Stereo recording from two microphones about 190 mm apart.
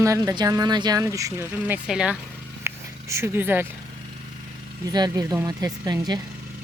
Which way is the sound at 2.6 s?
15° right (ahead or behind).